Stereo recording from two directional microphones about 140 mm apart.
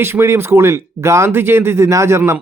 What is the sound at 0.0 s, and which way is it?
Speech, 20° right (ahead or behind).